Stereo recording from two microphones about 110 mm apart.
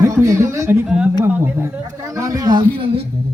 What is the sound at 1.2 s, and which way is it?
Speech, 20° right (ahead or behind).